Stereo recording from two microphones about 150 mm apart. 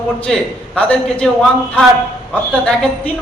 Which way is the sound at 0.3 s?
5° left (ahead or behind).